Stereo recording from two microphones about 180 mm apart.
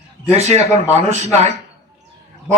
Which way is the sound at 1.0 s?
40° right (ahead or behind).